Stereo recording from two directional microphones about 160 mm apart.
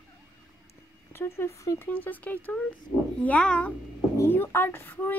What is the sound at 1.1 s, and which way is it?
A woman's voice, 15° left (ahead or behind).